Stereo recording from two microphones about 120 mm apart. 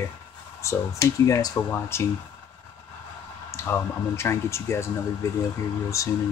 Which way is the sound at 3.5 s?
20° left (ahead or behind).